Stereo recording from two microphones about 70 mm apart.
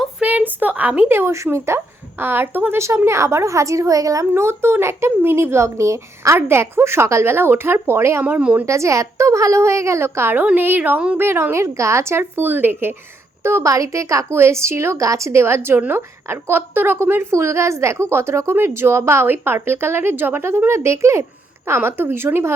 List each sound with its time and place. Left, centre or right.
0.2 s a sound: right
1.1 s a woman's voice: right
8.2 s a woman's voice: right
8.6 s a woman's voice: right
13.4 s a woman's voice: right